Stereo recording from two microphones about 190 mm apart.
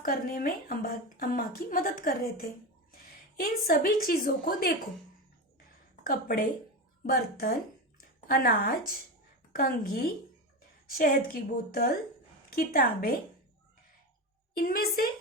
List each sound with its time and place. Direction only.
0.0 s a woman's voice: 50° left (ahead or behind)
6.0 s a woman's voice: 50° left (ahead or behind)
14.5 s a woman's voice: 50° left (ahead or behind)